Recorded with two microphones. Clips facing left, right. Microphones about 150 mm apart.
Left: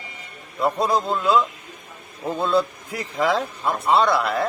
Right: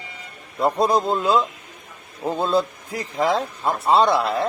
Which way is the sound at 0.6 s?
35° right (ahead or behind).